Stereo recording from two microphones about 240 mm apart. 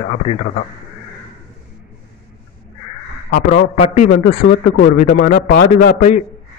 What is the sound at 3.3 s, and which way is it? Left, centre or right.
A man's voice, left.